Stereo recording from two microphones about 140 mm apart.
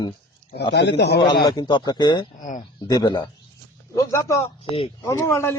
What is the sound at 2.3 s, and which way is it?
Speech, 65° left (ahead or behind).